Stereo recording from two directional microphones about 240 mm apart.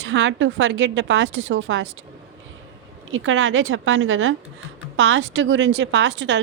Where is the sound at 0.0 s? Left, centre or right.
Right.